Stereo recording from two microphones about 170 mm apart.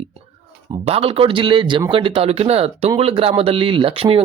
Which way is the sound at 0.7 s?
35° right (ahead or behind).